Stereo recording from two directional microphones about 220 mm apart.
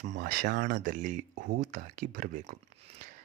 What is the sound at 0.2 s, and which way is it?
Speech, 45° right (ahead or behind).